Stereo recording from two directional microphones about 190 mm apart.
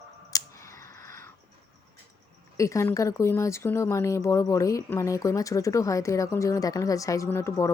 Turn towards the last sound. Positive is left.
turn(degrees=15)  # may be behind; listen again after turning